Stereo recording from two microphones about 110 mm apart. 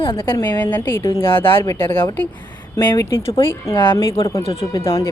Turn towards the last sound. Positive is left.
turn(degrees=30)  # may be behind; listen again after turning